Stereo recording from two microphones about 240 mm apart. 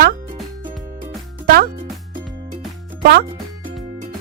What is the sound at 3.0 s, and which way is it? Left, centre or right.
Speech, right.